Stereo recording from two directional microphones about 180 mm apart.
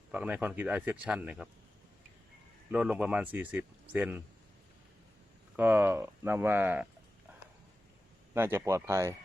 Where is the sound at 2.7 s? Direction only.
5° right (ahead or behind).